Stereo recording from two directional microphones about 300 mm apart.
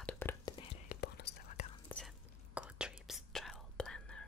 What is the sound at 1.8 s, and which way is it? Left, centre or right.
Whispering, centre.